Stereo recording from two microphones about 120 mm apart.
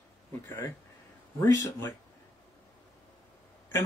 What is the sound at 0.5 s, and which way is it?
Speech, 20° left (ahead or behind).